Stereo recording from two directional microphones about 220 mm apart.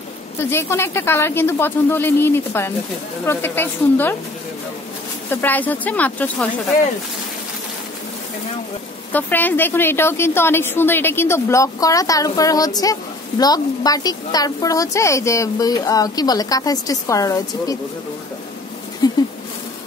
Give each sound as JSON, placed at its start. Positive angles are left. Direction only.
{"t": 0.4, "sound": "a woman's voice", "side_deg": 10}
{"t": 5.3, "sound": "a woman's voice", "side_deg": 10}
{"t": 9.1, "sound": "a woman's voice", "side_deg": 10}
{"t": 19.0, "sound": "a sound", "side_deg": 15}